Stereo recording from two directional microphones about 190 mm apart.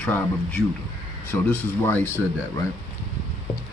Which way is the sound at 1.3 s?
10° left (ahead or behind).